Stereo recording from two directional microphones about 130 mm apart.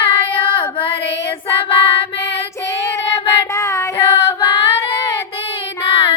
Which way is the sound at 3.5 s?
20° left (ahead or behind).